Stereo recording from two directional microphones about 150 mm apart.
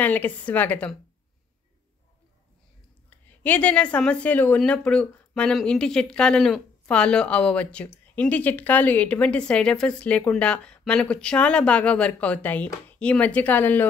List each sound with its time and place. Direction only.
0.0 s speech: 10° left (ahead or behind)
3.3 s speech: 10° left (ahead or behind)